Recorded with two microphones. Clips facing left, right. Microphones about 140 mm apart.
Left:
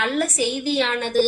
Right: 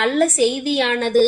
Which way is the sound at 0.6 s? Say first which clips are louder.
Right 3 dB; 55° right (ahead or behind).